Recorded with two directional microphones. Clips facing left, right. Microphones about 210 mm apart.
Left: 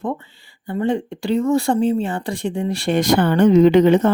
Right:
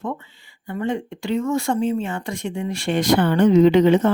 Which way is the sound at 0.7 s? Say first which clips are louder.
Left 4 dB; 30° left (ahead or behind).